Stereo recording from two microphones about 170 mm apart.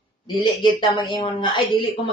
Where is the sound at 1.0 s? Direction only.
30° left (ahead or behind).